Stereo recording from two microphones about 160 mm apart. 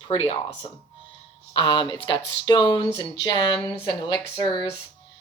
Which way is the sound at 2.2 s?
90° left.